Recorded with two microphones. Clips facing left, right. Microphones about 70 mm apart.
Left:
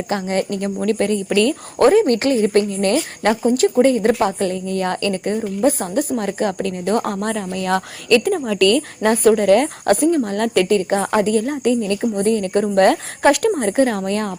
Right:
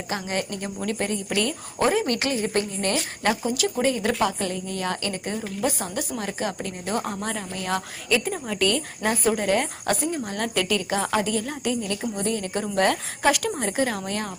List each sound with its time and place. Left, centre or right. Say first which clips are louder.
0.1 s a woman's voice: left 7 dB; left
6.6 s speech: left 9 dB; left
8.4 s a woman's voice: left 9 dB; left